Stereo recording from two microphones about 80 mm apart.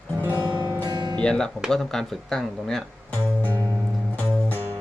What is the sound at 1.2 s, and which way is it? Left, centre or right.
Speech, centre.